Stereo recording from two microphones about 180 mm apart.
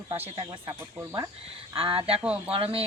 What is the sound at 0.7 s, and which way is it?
Speech, 20° right (ahead or behind).